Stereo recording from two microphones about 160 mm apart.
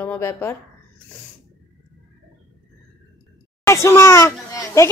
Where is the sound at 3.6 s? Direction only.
15° left (ahead or behind).